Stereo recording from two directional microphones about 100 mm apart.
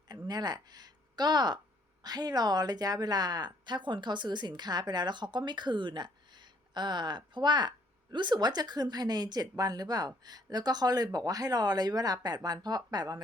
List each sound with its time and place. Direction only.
0.3 s a woman's voice: 45° right (ahead or behind)